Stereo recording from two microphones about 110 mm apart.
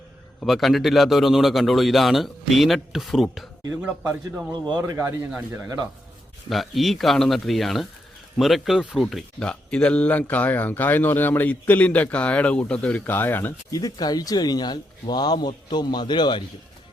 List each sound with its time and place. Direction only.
0.4 s a man's voice: centre (ahead or behind)
4.8 s speech: 25° right (ahead or behind)
6.5 s a man's voice: centre (ahead or behind); by 13.5 s 20° left (ahead or behind)
13.7 s speech: 35° left (ahead or behind)